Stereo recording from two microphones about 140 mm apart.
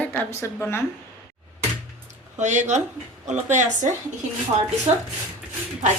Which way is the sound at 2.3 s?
60° right (ahead or behind).